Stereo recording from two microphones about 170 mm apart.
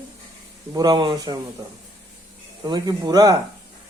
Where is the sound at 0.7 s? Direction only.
25° right (ahead or behind).